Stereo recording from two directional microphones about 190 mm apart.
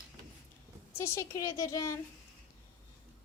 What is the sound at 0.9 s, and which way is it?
Speech, 15° left (ahead or behind).